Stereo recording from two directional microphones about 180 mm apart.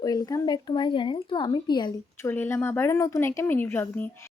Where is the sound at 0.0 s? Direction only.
20° left (ahead or behind).